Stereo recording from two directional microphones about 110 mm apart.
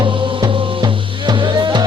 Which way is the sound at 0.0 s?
50° right (ahead or behind).